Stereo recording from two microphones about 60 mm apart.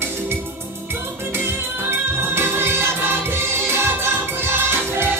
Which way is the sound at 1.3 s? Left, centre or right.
Right.